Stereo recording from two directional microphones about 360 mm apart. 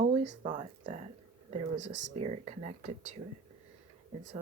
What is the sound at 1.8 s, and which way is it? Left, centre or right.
Speech, right.